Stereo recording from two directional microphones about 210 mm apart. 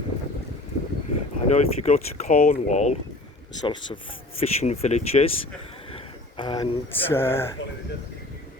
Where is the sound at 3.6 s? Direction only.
20° left (ahead or behind).